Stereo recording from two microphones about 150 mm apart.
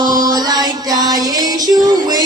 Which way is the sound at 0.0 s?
25° right (ahead or behind).